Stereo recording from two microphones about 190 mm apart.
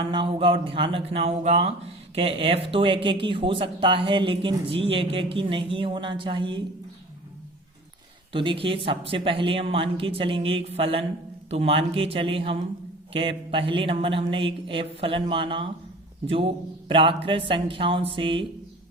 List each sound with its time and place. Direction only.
0.0 s speech: 25° right (ahead or behind)
8.3 s speech: 25° right (ahead or behind)